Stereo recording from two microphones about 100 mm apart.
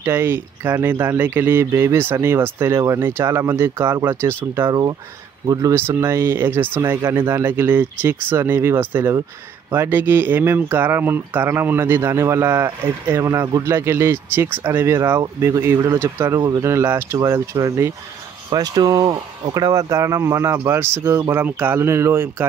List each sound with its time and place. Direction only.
0.0 s speech: 25° right (ahead or behind)
4.6 s speech: 40° right (ahead or behind)
5.8 s speech: 25° right (ahead or behind)
18.5 s speech: 40° right (ahead or behind); by 22.5 s 25° right (ahead or behind)